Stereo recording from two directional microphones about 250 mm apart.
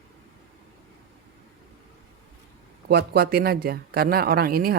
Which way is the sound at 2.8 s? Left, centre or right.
Right.